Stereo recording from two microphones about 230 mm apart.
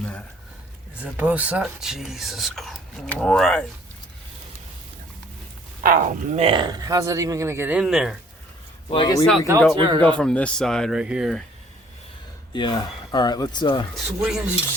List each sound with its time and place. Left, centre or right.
1.0 s speech: centre
5.8 s speech: right; by 8.1 s centre
8.9 s speech: centre
9.7 s a man's voice: right
10.2 s speech: centre
12.5 s speech: centre
13.9 s speech: centre